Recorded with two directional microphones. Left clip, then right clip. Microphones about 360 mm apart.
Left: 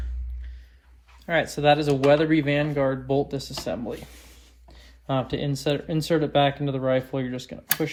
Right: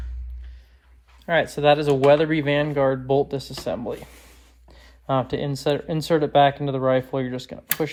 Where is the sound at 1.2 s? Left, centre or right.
Right.